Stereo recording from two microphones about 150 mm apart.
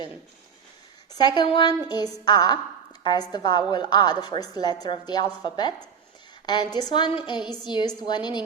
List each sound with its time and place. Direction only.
1.1 s a woman's voice: 30° left (ahead or behind)